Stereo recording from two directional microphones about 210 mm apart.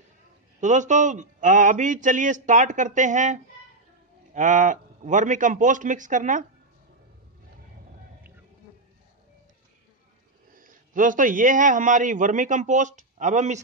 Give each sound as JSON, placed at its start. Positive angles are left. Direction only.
{"t": 0.6, "sound": "a man's voice", "side_deg": -35}
{"t": 10.5, "sound": "a man's voice", "side_deg": -40}